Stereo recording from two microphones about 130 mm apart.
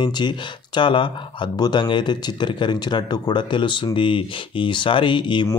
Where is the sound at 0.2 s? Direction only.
35° left (ahead or behind).